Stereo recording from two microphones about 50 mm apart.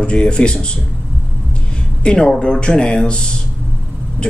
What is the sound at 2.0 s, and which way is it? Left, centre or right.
Speech, left.